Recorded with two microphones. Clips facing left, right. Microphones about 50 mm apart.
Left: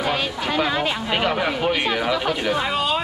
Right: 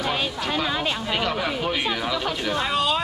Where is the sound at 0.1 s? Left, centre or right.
Centre.